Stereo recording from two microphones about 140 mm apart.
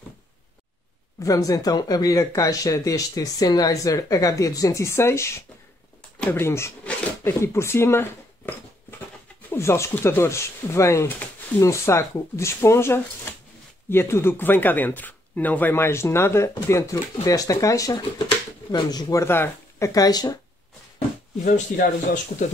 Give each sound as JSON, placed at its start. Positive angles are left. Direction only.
{"t": 1.2, "sound": "speech", "side_deg": 25}
{"t": 21.5, "sound": "speech", "side_deg": 80}